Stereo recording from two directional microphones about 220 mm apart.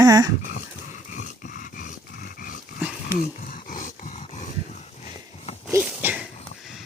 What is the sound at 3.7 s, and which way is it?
Dog, 35° left (ahead or behind).